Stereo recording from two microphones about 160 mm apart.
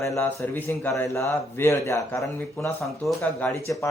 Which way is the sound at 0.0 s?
15° left (ahead or behind).